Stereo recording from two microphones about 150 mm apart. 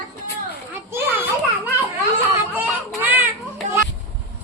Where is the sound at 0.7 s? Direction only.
15° right (ahead or behind).